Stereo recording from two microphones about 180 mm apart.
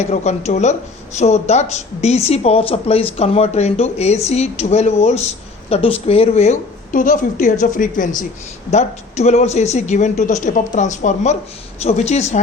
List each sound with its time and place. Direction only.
0.0 s a woman's voice: 40° left (ahead or behind)